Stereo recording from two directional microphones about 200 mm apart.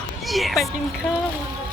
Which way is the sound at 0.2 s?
Centre (ahead or behind).